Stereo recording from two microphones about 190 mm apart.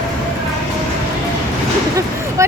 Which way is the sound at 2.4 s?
15° right (ahead or behind).